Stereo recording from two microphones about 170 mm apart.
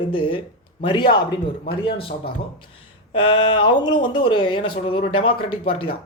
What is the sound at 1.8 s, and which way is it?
Speech, 30° left (ahead or behind).